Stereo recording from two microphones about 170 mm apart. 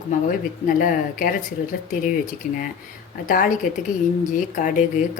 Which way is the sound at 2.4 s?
55° left (ahead or behind).